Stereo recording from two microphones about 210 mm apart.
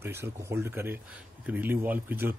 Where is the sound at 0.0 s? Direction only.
10° right (ahead or behind).